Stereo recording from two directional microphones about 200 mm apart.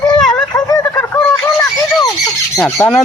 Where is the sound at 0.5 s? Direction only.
15° left (ahead or behind).